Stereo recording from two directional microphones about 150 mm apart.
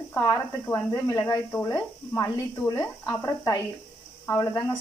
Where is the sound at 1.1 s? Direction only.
25° left (ahead or behind).